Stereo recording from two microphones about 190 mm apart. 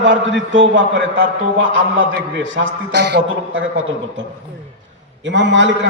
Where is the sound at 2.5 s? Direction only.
70° right (ahead or behind).